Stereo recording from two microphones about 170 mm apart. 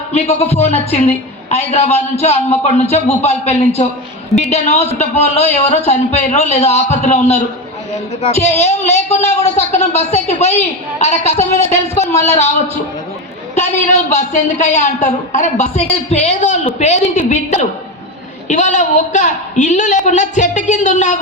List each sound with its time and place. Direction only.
0.1 s a woman's voice: 35° left (ahead or behind)